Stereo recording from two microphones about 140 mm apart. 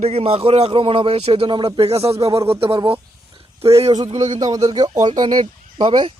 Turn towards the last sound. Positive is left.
turn(degrees=-35)  # may be behind; listen again after turning